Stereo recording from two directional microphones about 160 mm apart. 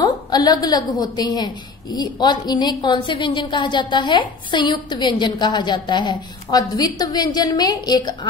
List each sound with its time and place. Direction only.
0.0 s a woman's voice: 25° left (ahead or behind)